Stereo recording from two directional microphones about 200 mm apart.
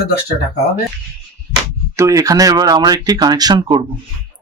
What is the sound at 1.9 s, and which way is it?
Speech, 15° right (ahead or behind).